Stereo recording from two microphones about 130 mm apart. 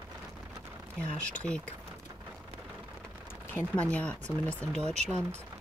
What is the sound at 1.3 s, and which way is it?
Speech, 10° left (ahead or behind).